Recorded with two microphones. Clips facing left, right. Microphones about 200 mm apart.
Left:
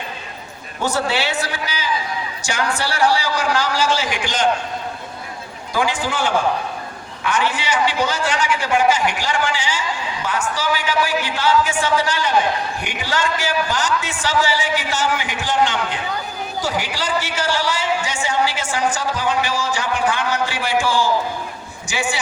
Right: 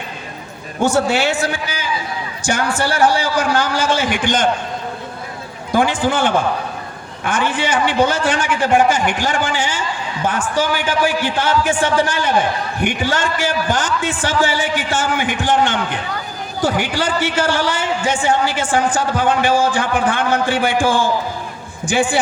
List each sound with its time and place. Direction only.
0.8 s a man's voice: 50° right (ahead or behind)
5.7 s a man's voice: 55° right (ahead or behind)